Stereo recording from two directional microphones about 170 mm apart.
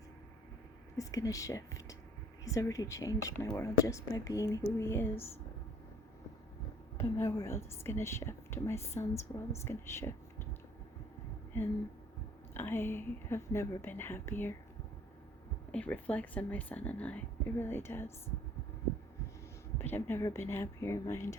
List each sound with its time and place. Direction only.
0.9 s speech: 20° left (ahead or behind)
6.9 s a woman's voice: 15° left (ahead or behind)
12.5 s a woman's voice: 15° left (ahead or behind)
15.7 s a woman's voice: 10° left (ahead or behind)
19.8 s a woman's voice: 15° left (ahead or behind)